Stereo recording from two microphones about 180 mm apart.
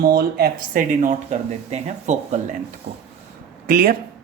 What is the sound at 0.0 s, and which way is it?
Speech, 60° right (ahead or behind).